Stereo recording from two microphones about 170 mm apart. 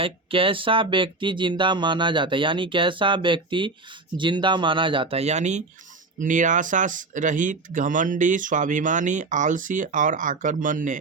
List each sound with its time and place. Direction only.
0.0 s speech: 30° right (ahead or behind); by 11.0 s 50° right (ahead or behind)